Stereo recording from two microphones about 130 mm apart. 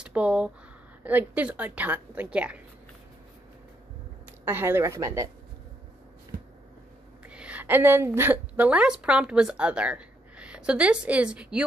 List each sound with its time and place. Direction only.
0.0 s a woman's voice: 10° right (ahead or behind)
4.5 s a woman's voice: 15° right (ahead or behind)
7.2 s a woman's voice: 10° right (ahead or behind)